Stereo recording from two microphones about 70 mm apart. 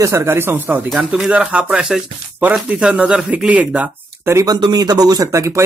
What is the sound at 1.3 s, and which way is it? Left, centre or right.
Speech, centre.